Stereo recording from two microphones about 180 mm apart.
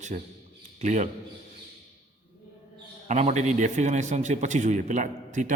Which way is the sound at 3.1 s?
40° right (ahead or behind).